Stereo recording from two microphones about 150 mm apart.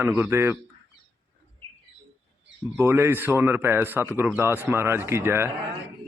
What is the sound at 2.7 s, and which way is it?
Speech, 15° right (ahead or behind).